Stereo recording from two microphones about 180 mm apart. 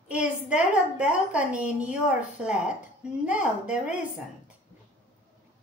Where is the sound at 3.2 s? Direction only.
5° right (ahead or behind).